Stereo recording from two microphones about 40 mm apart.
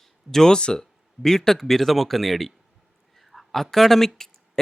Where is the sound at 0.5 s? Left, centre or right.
Centre.